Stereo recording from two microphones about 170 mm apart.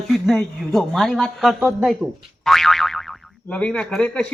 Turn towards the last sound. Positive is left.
turn(degrees=5)  # may be behind; listen again after turning